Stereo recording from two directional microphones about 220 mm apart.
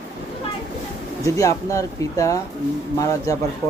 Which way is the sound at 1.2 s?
15° left (ahead or behind).